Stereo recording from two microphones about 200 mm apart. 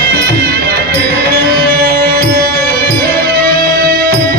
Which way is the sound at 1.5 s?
50° right (ahead or behind).